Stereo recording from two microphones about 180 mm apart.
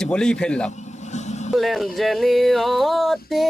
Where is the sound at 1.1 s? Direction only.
40° left (ahead or behind).